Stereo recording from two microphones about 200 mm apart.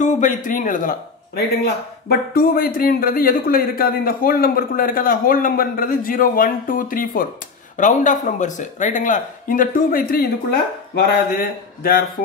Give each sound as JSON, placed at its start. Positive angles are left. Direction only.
{"t": 0.0, "sound": "a man's voice", "side_deg": 40}
{"t": 11.3, "sound": "a man's voice", "side_deg": 50}